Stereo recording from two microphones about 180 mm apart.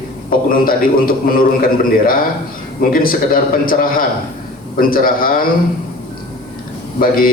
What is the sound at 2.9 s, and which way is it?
A man's voice, 50° left (ahead or behind).